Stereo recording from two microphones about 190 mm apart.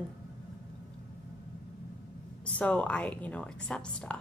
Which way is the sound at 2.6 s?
5° left (ahead or behind).